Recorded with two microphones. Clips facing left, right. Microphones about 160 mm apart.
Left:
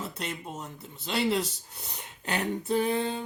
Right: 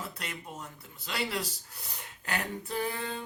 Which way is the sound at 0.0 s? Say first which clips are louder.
Left 5 dB; 25° left (ahead or behind).